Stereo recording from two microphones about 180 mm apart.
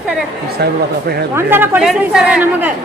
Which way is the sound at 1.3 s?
10° right (ahead or behind).